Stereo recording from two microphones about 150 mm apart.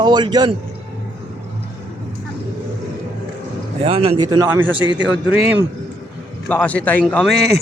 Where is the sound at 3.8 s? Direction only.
40° right (ahead or behind).